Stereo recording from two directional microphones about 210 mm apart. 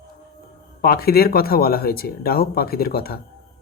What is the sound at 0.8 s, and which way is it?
Speech, 45° left (ahead or behind).